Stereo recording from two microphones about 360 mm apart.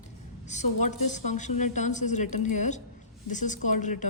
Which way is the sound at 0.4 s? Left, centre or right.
Centre.